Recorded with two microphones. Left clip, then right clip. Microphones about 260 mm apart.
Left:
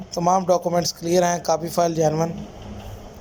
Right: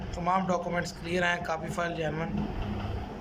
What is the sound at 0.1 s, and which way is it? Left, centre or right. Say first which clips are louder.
A man's voice: left 10 dB; centre.